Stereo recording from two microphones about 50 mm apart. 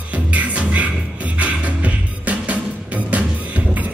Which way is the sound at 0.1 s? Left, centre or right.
Right.